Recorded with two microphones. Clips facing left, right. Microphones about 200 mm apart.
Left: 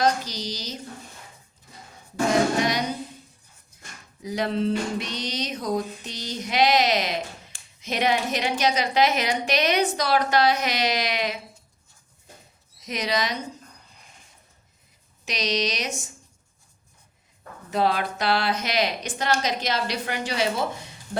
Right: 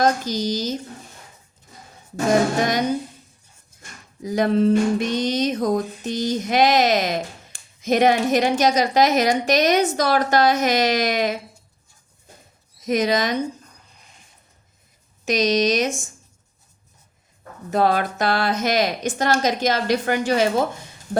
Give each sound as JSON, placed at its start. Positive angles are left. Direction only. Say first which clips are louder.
{"t": 0.0, "sound": "music", "louder": "right 4 dB", "side_deg": -45}
{"t": 2.6, "sound": "music", "louder": "right 3 dB", "side_deg": -50}
{"t": 4.2, "sound": "music", "louder": "right 7 dB", "side_deg": -45}
{"t": 12.8, "sound": "music", "louder": "right 7 dB", "side_deg": -50}
{"t": 15.2, "sound": "music", "louder": "right 8 dB", "side_deg": -45}
{"t": 17.7, "sound": "music", "louder": "right 4 dB", "side_deg": -45}